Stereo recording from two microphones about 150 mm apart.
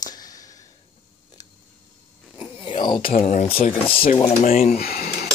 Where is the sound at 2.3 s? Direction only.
35° left (ahead or behind).